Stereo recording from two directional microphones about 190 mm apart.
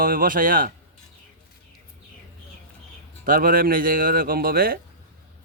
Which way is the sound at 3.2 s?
45° right (ahead or behind).